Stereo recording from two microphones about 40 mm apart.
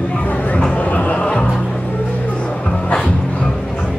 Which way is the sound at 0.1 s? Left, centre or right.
Left.